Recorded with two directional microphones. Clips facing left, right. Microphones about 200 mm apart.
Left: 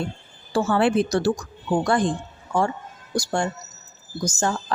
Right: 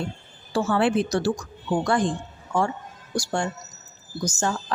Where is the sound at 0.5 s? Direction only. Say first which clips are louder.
Left 2 dB; 40° left (ahead or behind).